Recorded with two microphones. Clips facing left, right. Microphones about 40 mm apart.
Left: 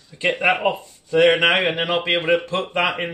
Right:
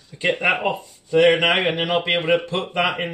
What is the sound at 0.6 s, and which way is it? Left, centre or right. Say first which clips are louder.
Speech: left 2 dB; centre.